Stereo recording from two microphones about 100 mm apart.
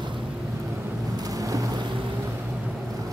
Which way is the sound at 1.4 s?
35° right (ahead or behind).